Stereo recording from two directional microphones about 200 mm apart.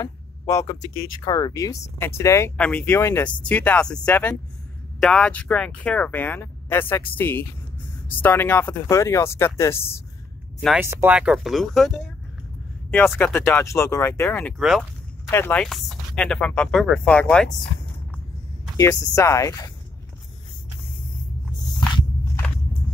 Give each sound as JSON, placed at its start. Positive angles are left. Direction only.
{"t": 0.0, "sound": "speech", "side_deg": 15}
{"t": 10.8, "sound": "speech", "side_deg": -10}
{"t": 12.9, "sound": "speech", "side_deg": 10}
{"t": 14.6, "sound": "speech", "side_deg": 0}
{"t": 15.2, "sound": "speech", "side_deg": 10}
{"t": 18.8, "sound": "speech", "side_deg": 15}
{"t": 21.5, "sound": "walk", "side_deg": 20}